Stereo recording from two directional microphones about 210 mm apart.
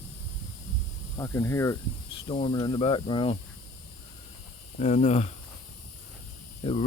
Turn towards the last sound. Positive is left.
turn(degrees=30)  # may be behind; listen again after turning